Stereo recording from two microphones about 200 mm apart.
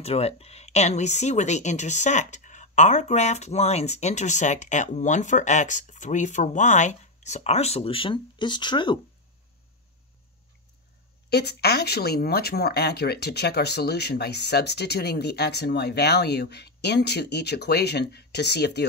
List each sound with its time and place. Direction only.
0.0 s speech: 30° left (ahead or behind)
11.2 s speech: 55° left (ahead or behind)